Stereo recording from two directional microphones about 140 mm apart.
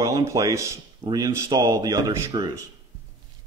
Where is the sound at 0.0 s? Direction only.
20° right (ahead or behind).